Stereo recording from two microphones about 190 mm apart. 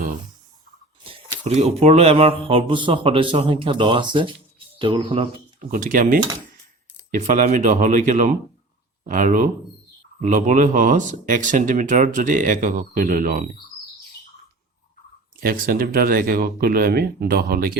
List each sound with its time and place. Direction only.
1.5 s speech: 35° right (ahead or behind)
5.5 s speech: 45° right (ahead or behind)
15.4 s speech: 50° right (ahead or behind)